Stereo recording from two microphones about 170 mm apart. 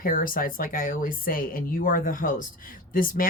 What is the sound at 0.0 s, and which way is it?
Speech, 55° left (ahead or behind).